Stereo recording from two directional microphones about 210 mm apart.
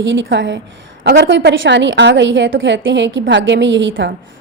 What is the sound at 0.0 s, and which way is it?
A woman's voice, 60° right (ahead or behind).